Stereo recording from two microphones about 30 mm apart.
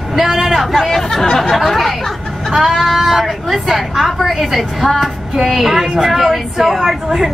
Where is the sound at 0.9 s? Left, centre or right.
Centre.